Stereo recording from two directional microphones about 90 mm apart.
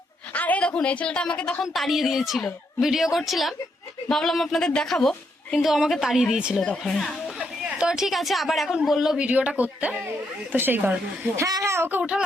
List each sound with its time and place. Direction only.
0.3 s a woman's voice: 15° left (ahead or behind); by 6.6 s 5° right (ahead or behind)
6.6 s speech: 5° left (ahead or behind)
7.3 s speech: 10° right (ahead or behind)
9.2 s speech: 15° right (ahead or behind)
11.3 s speech: 35° right (ahead or behind); by 12.1 s 20° right (ahead or behind)